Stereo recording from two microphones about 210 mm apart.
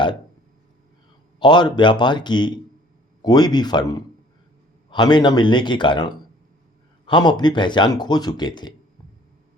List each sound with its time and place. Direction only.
1.4 s speech: 20° left (ahead or behind)